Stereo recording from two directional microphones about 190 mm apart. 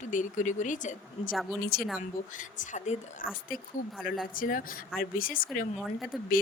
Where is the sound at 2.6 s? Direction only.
40° left (ahead or behind).